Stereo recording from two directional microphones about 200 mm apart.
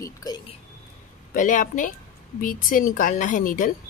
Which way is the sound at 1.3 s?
40° left (ahead or behind).